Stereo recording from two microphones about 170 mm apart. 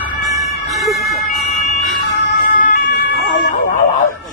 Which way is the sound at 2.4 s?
50° left (ahead or behind).